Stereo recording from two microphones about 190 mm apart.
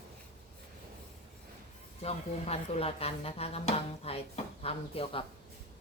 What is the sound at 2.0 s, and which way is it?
Speech, 30° left (ahead or behind).